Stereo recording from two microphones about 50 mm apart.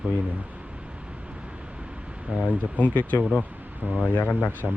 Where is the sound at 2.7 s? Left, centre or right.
Left.